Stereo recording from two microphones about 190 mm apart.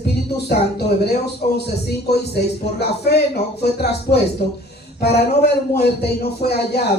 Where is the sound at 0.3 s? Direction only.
55° left (ahead or behind).